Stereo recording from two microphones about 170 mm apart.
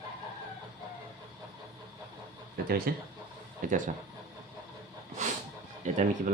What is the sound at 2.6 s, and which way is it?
Speech, 60° right (ahead or behind).